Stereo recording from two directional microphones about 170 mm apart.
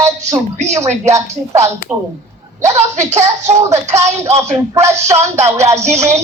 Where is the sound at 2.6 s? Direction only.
45° right (ahead or behind).